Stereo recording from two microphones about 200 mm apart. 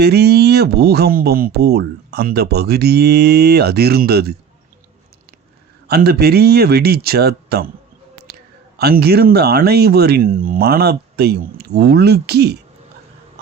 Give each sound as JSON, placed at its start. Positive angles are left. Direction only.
{"t": 0.0, "sound": "speech", "side_deg": -55}
{"t": 5.9, "sound": "speech", "side_deg": -50}
{"t": 8.8, "sound": "speech", "side_deg": -50}